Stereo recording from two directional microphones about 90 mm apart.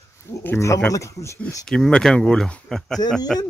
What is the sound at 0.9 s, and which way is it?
Speech, 35° left (ahead or behind).